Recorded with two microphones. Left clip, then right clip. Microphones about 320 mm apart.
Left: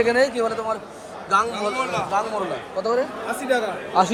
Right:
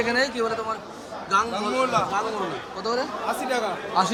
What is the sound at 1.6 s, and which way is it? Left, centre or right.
Speech, right.